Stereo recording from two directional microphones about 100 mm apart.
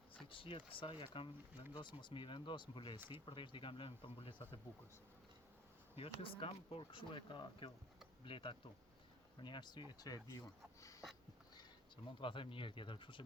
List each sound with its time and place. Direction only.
0.3 s speech: 60° left (ahead or behind)
1.7 s speech: 50° left (ahead or behind)
6.0 s speech: 70° left (ahead or behind); by 11.0 s 35° left (ahead or behind)
12.2 s speech: 60° left (ahead or behind)